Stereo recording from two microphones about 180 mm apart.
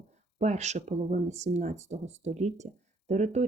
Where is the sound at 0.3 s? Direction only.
40° right (ahead or behind).